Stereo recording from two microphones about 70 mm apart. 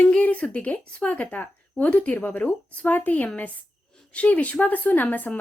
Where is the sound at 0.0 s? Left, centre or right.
Centre.